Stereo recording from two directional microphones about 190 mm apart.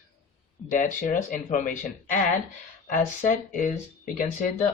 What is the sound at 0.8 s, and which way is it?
Speech, 45° left (ahead or behind).